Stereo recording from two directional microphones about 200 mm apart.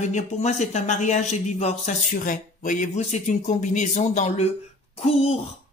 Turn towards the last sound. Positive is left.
turn(degrees=30)  # may be behind; listen again after turning